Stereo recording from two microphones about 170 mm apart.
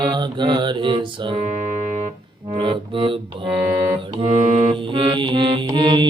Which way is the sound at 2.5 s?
30° right (ahead or behind).